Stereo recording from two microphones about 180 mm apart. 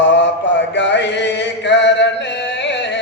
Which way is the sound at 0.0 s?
80° left.